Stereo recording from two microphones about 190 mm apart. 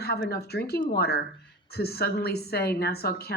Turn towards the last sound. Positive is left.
turn(degrees=55)  # may be behind; listen again after turning